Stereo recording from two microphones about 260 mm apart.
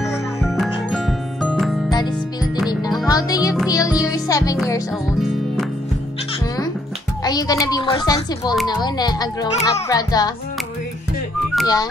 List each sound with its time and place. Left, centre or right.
0.4 s music: centre
3.1 s speech: centre
3.6 s music: centre
4.0 s speech: centre
7.2 s a child's voice: centre
11.6 s speech: centre